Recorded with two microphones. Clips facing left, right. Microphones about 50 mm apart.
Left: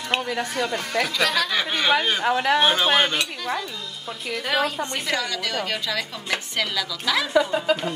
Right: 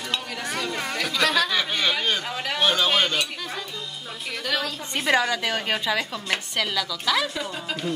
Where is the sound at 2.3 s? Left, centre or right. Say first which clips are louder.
Left 9 dB; left.